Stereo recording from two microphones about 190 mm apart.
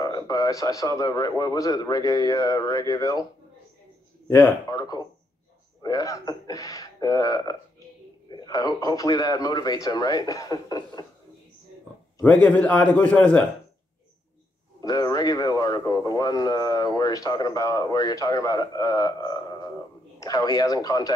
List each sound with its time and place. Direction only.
0.0 s speech: 20° left (ahead or behind)
4.6 s speech: 20° left (ahead or behind)
12.2 s a man's voice: 10° left (ahead or behind)
14.8 s speech: 20° left (ahead or behind)